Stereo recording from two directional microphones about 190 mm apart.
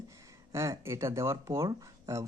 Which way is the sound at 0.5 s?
15° right (ahead or behind).